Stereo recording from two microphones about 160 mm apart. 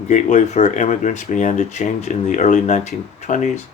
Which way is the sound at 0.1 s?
50° left (ahead or behind).